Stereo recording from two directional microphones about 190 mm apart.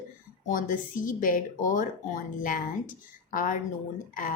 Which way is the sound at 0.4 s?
45° left (ahead or behind).